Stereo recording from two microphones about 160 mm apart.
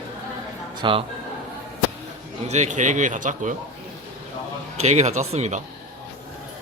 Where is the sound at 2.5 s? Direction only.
45° right (ahead or behind).